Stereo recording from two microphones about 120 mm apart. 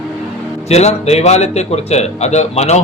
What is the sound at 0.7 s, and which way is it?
Speech, 65° left (ahead or behind).